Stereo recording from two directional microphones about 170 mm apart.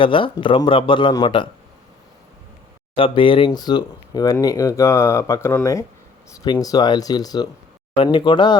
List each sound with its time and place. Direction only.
0.0 s speech: 30° left (ahead or behind)
2.9 s speech: 30° left (ahead or behind)